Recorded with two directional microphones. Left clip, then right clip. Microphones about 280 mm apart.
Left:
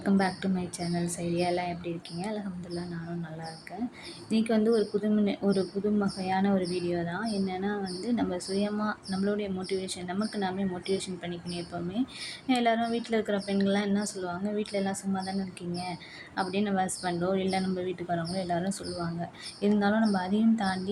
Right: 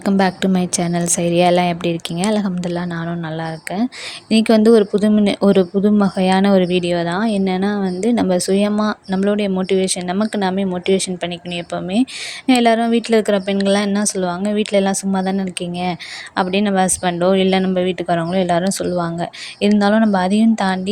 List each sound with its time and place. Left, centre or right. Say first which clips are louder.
0.0 s speech: right 12 dB; right
4.3 s speech: right 14 dB; right
12.5 s speech: right 13 dB; right
16.4 s speech: right 13 dB; right